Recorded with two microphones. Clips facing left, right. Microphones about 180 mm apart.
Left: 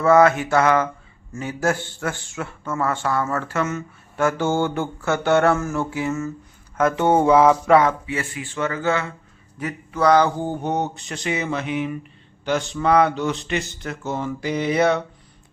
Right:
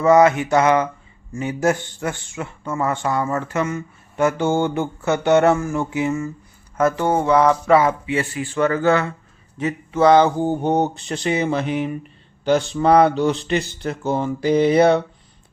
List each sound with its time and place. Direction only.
0.0 s a man's voice: 15° right (ahead or behind)
6.9 s speech: 25° left (ahead or behind)
7.2 s mantra: 5° left (ahead or behind)
8.0 s speech: 25° right (ahead or behind)
8.4 s speech: 50° right (ahead or behind)
9.6 s speech: 25° right (ahead or behind)
10.7 s speech: 30° right (ahead or behind)